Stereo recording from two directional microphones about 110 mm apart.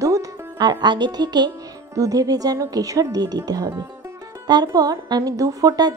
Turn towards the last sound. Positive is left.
turn(degrees=-35)  # may be behind; listen again after turning